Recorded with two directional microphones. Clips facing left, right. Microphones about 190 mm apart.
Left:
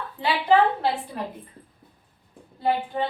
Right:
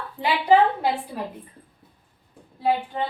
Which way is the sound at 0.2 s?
15° right (ahead or behind).